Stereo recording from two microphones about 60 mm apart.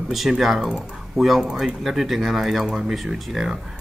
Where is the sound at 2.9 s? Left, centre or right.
Centre.